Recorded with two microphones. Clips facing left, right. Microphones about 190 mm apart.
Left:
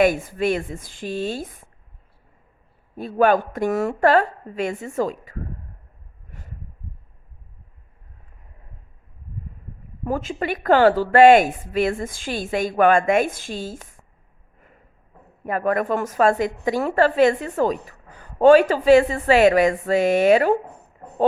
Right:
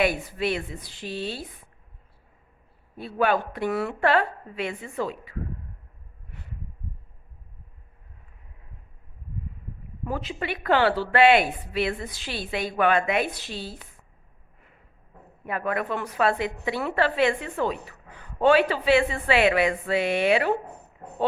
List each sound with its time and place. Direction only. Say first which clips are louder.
0.0 s a woman's voice: left 6 dB; 45° left (ahead or behind)
3.0 s a woman's voice: left 6 dB; 45° left (ahead or behind)
6.3 s a sound: left 2 dB; 45° left (ahead or behind)
10.0 s a woman's voice: left 6 dB; 45° left (ahead or behind)
15.4 s a woman's voice: left 6 dB; 45° left (ahead or behind)